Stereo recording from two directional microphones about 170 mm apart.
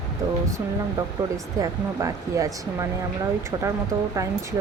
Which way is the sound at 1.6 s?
20° right (ahead or behind).